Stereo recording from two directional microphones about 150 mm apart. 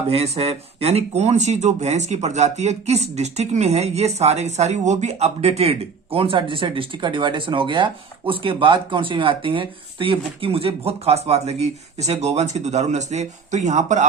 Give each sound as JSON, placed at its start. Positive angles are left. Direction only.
{"t": 0.1, "sound": "speech", "side_deg": -45}